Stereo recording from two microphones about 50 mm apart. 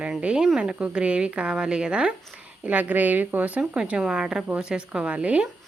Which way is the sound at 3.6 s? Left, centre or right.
Centre.